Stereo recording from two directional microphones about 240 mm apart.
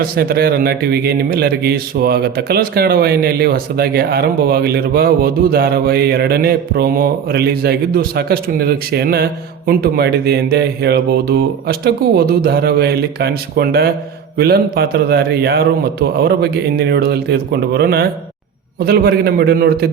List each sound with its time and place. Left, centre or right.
0.0 s a man's voice: right